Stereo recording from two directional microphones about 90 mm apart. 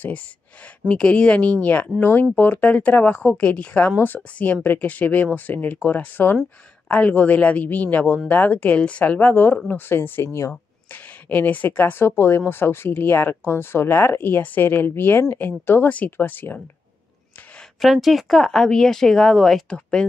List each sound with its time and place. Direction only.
0.8 s speech: 10° left (ahead or behind); by 10.5 s 30° left (ahead or behind)
10.9 s speech: 20° left (ahead or behind)
17.7 s speech: centre (ahead or behind)